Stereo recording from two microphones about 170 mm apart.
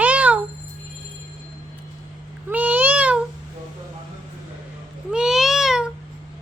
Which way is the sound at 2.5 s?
10° right (ahead or behind).